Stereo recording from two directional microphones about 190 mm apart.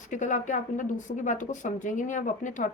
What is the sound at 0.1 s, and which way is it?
Speech, 40° left (ahead or behind).